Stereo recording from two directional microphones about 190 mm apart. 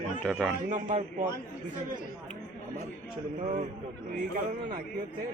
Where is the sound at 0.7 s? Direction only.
40° right (ahead or behind).